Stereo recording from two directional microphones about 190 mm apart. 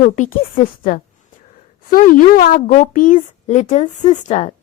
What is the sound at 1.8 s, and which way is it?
A woman's voice, 45° left (ahead or behind).